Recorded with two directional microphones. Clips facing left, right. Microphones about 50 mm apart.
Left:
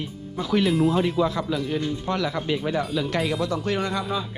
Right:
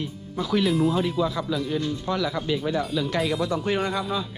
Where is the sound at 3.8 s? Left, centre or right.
Centre.